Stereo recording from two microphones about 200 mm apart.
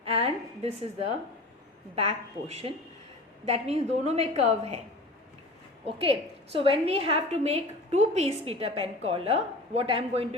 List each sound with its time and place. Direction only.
0.0 s a sound: 30° right (ahead or behind)
2.0 s a woman's voice: 30° right (ahead or behind)
5.8 s a woman's voice: 30° right (ahead or behind)